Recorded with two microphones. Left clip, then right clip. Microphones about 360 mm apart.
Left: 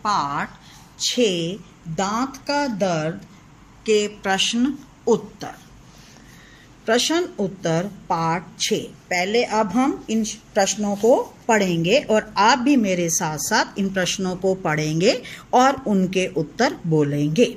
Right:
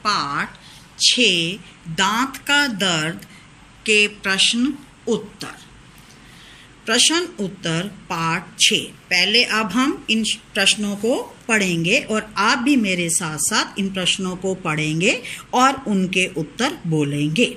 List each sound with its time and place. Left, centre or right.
0.0 s a sound: left
0.9 s a woman's voice: left
6.9 s a woman's voice: left